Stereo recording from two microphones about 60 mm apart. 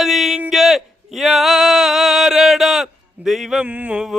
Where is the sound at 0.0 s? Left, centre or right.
Centre.